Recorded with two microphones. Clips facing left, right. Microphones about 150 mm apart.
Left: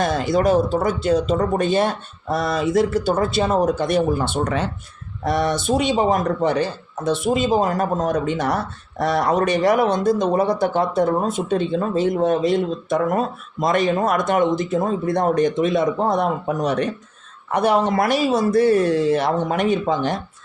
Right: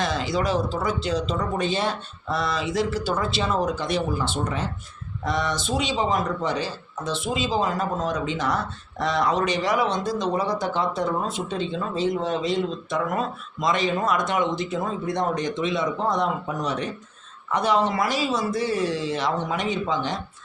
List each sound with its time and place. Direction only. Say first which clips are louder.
0.0 s speech: left 6 dB; 55° left (ahead or behind); by 4.7 s 75° left (ahead or behind)
5.2 s speech: left 6 dB; 55° left (ahead or behind)